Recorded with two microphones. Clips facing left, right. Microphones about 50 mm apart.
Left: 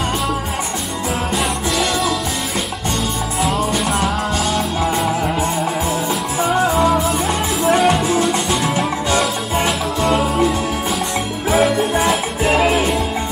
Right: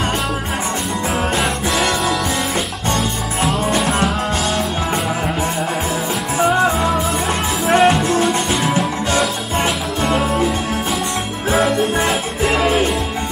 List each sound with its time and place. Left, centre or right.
3.4 s music: centre
6.7 s music: centre
11.5 s music: centre